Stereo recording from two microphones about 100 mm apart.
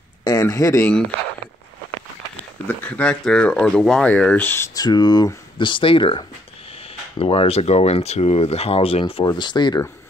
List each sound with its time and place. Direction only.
0.2 s speech: 35° left (ahead or behind)
2.8 s speech: 10° left (ahead or behind)
4.7 s speech: 45° left (ahead or behind); by 6.2 s 60° left (ahead or behind)
7.2 s speech: 70° left (ahead or behind)
9.2 s speech: 45° left (ahead or behind)